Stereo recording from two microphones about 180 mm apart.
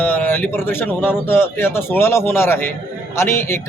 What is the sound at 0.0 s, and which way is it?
A man's voice, 10° left (ahead or behind).